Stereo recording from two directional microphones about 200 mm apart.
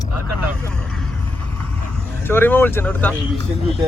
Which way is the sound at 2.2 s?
10° left (ahead or behind).